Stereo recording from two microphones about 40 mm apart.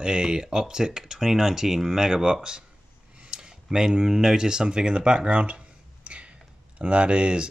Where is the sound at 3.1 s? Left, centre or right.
Right.